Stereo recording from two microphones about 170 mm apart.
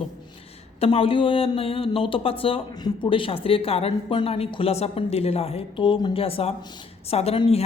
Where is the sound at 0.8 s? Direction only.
35° left (ahead or behind).